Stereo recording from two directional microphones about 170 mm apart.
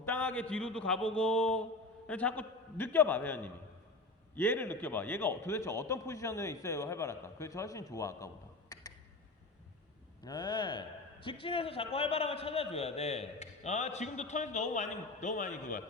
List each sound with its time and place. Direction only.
0.0 s a man's voice: 10° left (ahead or behind)
8.7 s a sound: 20° left (ahead or behind)
10.2 s a man's voice: 25° left (ahead or behind); by 15.8 s 50° left (ahead or behind)